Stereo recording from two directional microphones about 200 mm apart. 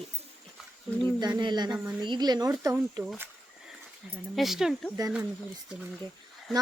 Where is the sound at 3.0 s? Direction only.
5° right (ahead or behind).